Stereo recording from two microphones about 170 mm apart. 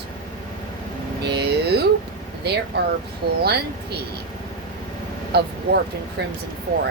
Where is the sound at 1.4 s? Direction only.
75° right (ahead or behind).